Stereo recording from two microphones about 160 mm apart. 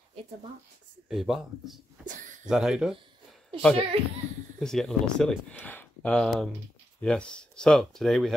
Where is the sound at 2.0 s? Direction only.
55° right (ahead or behind).